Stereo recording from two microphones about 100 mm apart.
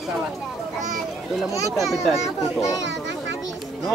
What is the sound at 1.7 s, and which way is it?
Speech, centre (ahead or behind).